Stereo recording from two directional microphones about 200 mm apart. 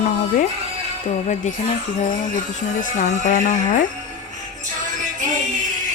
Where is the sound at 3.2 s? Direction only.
40° left (ahead or behind).